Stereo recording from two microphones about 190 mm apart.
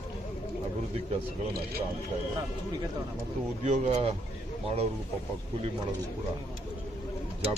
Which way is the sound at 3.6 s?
35° right (ahead or behind).